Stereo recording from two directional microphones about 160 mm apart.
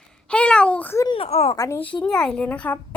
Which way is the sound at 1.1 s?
40° left (ahead or behind).